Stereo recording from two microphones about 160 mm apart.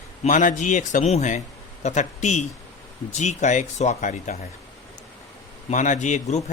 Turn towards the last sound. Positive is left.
turn(degrees=45)  # may be behind; listen again after turning